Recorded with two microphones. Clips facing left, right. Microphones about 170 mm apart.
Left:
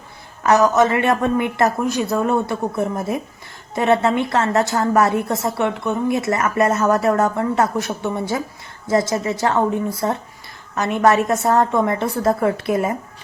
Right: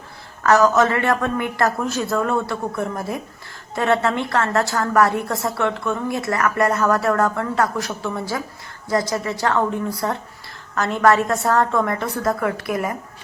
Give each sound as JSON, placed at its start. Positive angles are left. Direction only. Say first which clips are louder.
{"t": 0.4, "sound": "a woman's voice", "louder": "left 1 dB", "side_deg": 20}